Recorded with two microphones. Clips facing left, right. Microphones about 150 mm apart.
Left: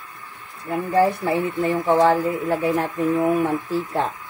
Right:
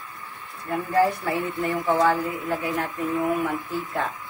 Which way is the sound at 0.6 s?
20° left (ahead or behind).